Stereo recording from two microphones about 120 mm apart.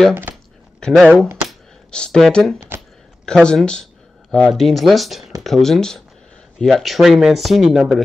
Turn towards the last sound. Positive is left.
turn(degrees=0)  # may be behind; listen again after turning